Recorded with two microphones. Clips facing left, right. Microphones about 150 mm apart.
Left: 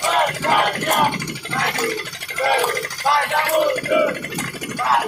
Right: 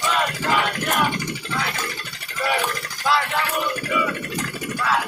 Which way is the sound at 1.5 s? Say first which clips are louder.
Left 7 dB; 75° left (ahead or behind).